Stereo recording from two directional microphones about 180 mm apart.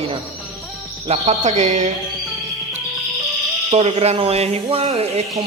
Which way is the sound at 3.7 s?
35° right (ahead or behind).